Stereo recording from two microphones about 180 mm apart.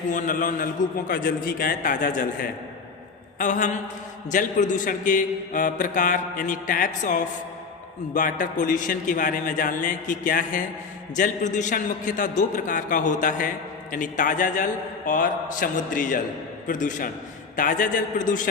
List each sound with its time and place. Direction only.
0.1 s a man's voice: 45° left (ahead or behind)